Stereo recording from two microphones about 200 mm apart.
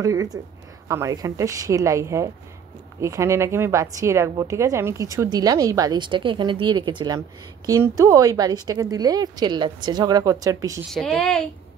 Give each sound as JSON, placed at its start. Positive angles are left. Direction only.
{"t": 0.0, "sound": "a woman's voice", "side_deg": -15}
{"t": 10.9, "sound": "speech", "side_deg": 0}